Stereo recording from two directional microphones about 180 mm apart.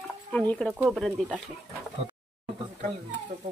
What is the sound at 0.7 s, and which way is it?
Speech, 10° right (ahead or behind).